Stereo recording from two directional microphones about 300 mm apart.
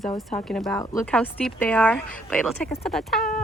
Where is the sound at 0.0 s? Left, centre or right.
Centre.